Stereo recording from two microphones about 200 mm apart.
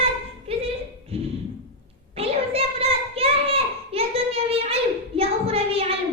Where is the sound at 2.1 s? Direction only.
30° right (ahead or behind).